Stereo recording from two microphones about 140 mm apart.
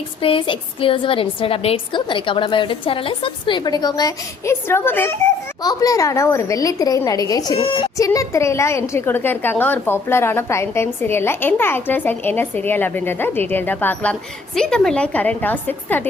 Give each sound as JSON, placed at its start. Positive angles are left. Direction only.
{"t": 0.2, "sound": "a woman's voice", "side_deg": 40}
{"t": 7.6, "sound": "a woman's voice", "side_deg": 40}
{"t": 7.9, "sound": "a woman's voice", "side_deg": 25}